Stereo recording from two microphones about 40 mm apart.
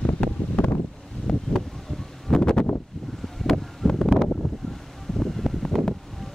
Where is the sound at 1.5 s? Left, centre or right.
Left.